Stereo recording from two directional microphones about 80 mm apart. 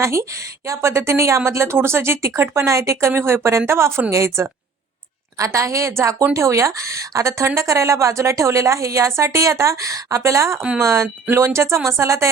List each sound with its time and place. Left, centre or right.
0.0 s speech: right